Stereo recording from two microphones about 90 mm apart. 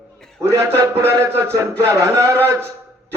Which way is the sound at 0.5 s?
30° right (ahead or behind).